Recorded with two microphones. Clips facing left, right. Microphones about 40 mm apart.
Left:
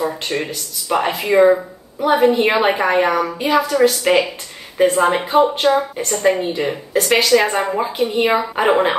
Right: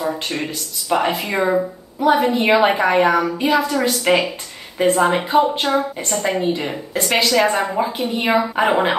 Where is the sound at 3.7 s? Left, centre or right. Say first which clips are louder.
Left 6 dB; centre.